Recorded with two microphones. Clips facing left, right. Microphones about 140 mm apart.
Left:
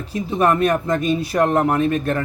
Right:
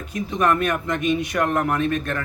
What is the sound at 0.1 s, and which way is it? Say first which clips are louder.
Speech: left 3 dB; 30° left (ahead or behind).